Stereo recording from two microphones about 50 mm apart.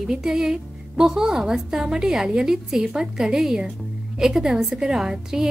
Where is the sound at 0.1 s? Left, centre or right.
Centre.